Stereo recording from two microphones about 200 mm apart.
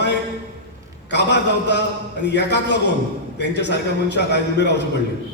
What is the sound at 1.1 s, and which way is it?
A man's voice, 60° left (ahead or behind).